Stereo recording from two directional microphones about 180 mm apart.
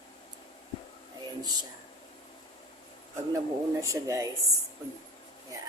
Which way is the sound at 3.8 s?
20° right (ahead or behind).